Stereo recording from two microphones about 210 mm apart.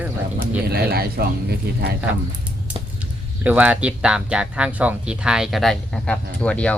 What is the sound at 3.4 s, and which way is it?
Speech, 5° right (ahead or behind).